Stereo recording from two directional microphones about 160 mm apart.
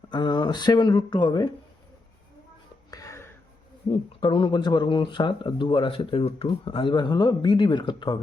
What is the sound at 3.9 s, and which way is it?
Speech, 30° left (ahead or behind).